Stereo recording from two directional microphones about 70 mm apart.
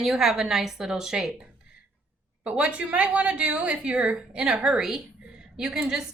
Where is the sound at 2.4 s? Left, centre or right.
Centre.